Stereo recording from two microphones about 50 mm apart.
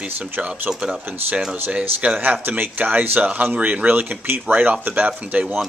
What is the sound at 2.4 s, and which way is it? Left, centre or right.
Speech, right.